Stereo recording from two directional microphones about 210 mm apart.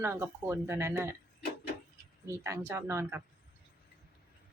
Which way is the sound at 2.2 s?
15° right (ahead or behind).